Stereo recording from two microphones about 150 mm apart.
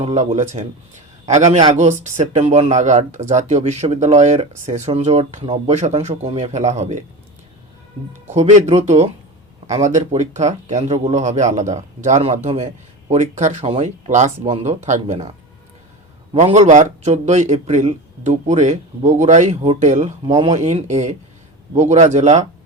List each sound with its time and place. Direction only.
0.0 s a man's voice: 45° right (ahead or behind)
8.3 s speech: 50° right (ahead or behind)
16.3 s speech: 50° right (ahead or behind)